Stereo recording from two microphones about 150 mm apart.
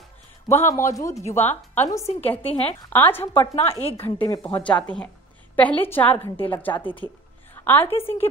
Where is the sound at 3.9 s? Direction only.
15° left (ahead or behind).